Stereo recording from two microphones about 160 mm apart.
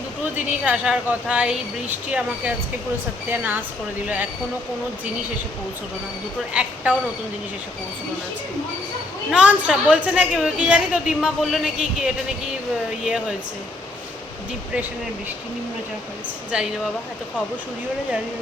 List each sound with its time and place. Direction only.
0.3 s a woman's voice: 10° right (ahead or behind)
6.5 s a woman's voice: 5° right (ahead or behind)
9.3 s a woman's voice: 5° right (ahead or behind)
16.5 s a woman's voice: 5° right (ahead or behind)